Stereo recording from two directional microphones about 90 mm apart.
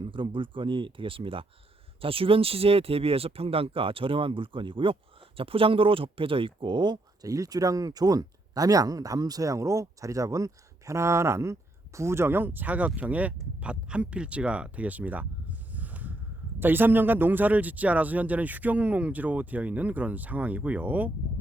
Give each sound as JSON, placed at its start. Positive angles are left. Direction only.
{"t": 0.0, "sound": "speech", "side_deg": -65}
{"t": 5.4, "sound": "speech", "side_deg": -90}